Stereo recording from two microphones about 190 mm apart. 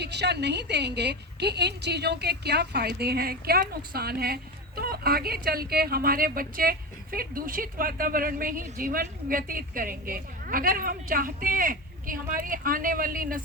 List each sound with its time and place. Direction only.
0.0 s a woman's voice: 60° right (ahead or behind)